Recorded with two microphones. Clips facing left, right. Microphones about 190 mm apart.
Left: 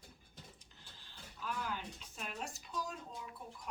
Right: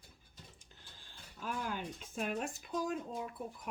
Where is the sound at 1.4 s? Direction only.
45° right (ahead or behind).